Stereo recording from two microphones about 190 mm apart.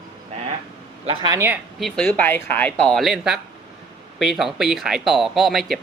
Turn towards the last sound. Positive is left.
turn(degrees=0)  # may be behind; listen again after turning